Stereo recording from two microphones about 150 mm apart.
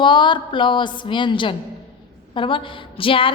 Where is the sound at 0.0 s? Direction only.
30° left (ahead or behind).